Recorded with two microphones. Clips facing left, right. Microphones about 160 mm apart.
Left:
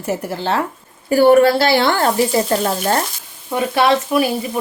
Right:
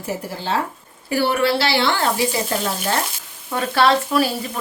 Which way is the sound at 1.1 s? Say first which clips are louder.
Left 8 dB; 45° left (ahead or behind).